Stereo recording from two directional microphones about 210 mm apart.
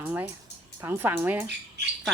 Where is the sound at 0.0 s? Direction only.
5° right (ahead or behind).